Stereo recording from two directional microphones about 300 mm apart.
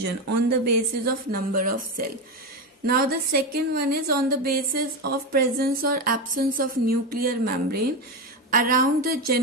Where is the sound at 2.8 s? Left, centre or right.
Right.